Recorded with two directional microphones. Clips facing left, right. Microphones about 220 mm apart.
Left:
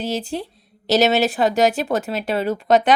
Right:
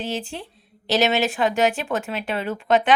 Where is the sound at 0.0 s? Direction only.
40° left (ahead or behind).